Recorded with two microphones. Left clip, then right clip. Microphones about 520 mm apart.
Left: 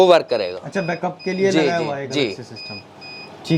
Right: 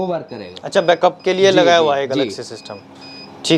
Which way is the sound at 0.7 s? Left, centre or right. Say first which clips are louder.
Right 10 dB; right.